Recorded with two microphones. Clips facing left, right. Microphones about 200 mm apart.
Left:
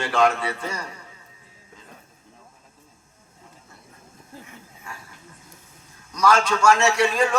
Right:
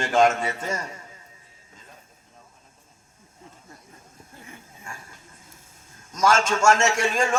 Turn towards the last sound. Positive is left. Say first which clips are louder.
# left 3 dB
turn(degrees=-45)  # may be behind; listen again after turning